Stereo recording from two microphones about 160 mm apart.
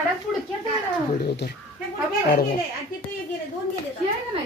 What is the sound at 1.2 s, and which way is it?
Speech, 80° left.